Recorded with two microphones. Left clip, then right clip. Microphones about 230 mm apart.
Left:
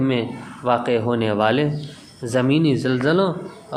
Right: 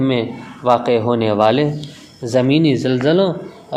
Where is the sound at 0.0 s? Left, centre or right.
Centre.